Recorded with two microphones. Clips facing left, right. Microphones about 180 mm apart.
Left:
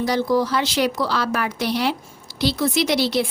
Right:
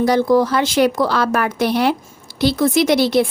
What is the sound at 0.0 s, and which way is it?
A woman's voice, 50° right (ahead or behind).